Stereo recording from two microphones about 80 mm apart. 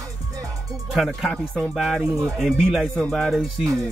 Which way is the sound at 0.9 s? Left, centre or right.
Centre.